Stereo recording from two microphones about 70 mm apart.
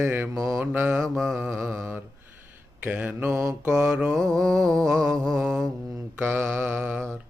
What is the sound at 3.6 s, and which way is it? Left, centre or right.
Mantra, centre.